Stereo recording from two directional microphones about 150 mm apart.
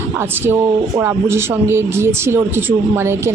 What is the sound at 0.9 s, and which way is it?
Speech, 20° right (ahead or behind).